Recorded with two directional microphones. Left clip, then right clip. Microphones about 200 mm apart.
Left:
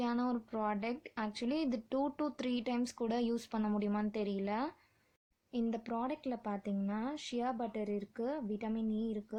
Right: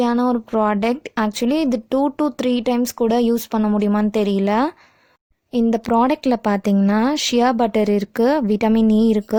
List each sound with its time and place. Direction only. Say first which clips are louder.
0.0 s speech: right 18 dB; 50° right (ahead or behind)